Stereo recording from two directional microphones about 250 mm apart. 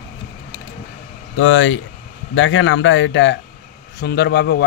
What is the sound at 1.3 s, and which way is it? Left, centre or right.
Speech, left.